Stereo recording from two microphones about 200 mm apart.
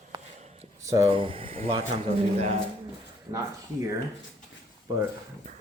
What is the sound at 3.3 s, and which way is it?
Speech, 15° right (ahead or behind).